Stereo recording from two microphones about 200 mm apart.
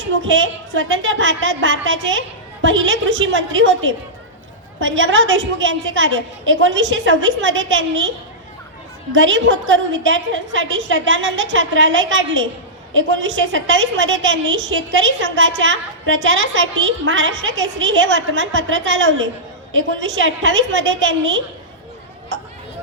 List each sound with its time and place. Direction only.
0.0 s a woman's voice: 70° right (ahead or behind)
9.1 s a woman's voice: 70° right (ahead or behind)